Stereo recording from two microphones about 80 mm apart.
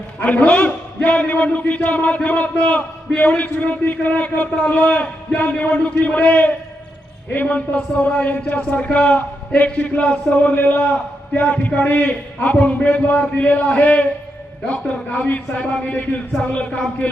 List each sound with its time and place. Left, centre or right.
0.2 s a man's voice: centre